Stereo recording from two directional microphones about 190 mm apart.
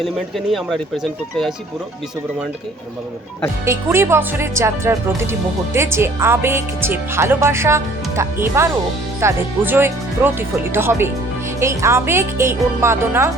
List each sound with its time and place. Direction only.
0.0 s speech: centre (ahead or behind)
3.7 s speech: 15° right (ahead or behind)